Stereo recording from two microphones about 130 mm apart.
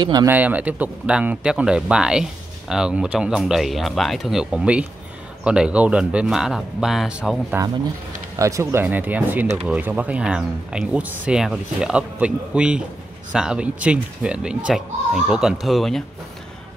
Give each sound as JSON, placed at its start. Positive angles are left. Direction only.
{"t": 0.0, "sound": "speech", "side_deg": -30}
{"t": 0.3, "sound": "speech", "side_deg": -15}
{"t": 7.5, "sound": "speech", "side_deg": -20}
{"t": 8.8, "sound": "speech", "side_deg": -10}